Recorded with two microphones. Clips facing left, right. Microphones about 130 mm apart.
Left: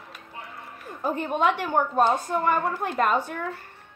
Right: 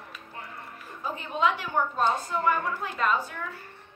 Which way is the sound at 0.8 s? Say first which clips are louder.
Left 8 dB; 50° left (ahead or behind).